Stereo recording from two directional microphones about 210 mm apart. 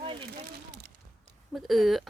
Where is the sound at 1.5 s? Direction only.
Centre (ahead or behind).